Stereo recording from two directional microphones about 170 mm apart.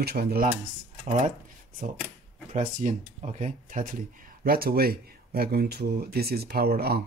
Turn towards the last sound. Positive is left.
turn(degrees=-65)  # may be behind; listen again after turning